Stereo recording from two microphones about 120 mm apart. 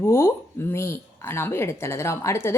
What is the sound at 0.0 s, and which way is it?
Speech, 20° left (ahead or behind).